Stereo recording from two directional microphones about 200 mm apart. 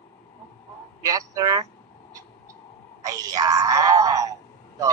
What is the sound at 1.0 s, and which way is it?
Speech, 15° right (ahead or behind).